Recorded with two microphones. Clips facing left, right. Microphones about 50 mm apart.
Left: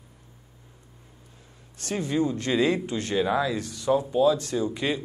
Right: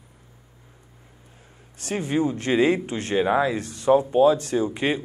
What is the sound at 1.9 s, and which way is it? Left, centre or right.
Speech, right.